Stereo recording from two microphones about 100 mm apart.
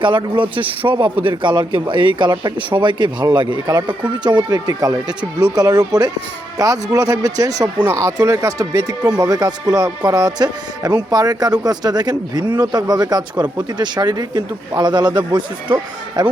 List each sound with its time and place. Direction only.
0.0 s a man's voice: 50° right (ahead or behind)
4.3 s a man's voice: 45° right (ahead or behind)